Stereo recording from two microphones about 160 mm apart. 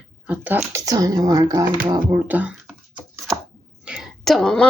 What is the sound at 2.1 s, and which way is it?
Speech, 10° right (ahead or behind).